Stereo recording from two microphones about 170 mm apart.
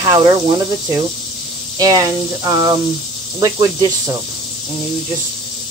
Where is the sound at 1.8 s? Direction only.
20° right (ahead or behind).